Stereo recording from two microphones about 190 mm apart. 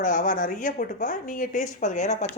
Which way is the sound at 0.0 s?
45° left (ahead or behind).